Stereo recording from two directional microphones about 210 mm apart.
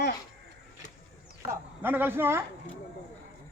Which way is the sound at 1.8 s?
10° right (ahead or behind).